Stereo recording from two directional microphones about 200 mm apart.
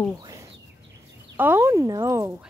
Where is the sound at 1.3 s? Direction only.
10° right (ahead or behind).